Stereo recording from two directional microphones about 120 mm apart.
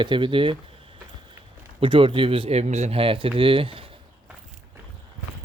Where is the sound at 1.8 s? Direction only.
45° right (ahead or behind).